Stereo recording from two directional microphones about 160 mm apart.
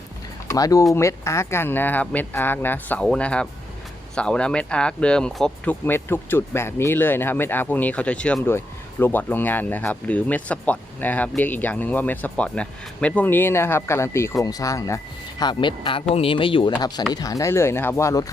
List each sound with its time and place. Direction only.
0.4 s speech: 20° left (ahead or behind); by 5.7 s 5° left (ahead or behind)
5.8 s speech: 15° left (ahead or behind)